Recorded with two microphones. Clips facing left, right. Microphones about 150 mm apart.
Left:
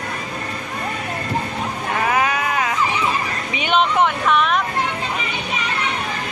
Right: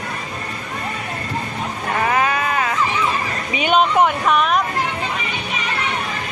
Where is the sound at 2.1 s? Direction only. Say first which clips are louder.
Even; 10° left (ahead or behind).